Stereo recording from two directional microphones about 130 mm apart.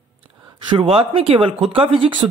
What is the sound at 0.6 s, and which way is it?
Speech, 45° right (ahead or behind).